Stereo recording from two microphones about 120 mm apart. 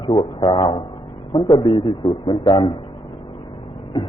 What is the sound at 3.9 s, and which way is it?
Speech, 45° left (ahead or behind).